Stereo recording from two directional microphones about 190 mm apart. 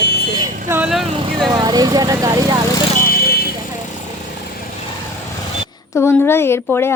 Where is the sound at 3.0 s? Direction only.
50° left (ahead or behind).